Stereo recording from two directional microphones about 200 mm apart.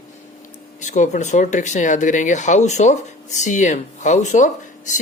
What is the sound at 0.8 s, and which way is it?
Speech, 40° left (ahead or behind).